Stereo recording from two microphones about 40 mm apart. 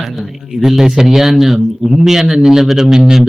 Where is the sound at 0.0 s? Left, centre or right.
Centre.